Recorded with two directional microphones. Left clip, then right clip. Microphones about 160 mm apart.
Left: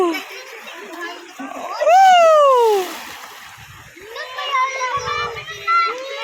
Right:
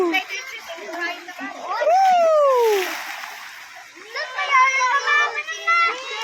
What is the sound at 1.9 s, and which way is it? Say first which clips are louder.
Cat: left 6 dB; 5° right (ahead or behind).